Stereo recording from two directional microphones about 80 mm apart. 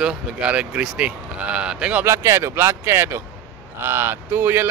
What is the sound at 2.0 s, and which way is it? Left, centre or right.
A man's voice, right.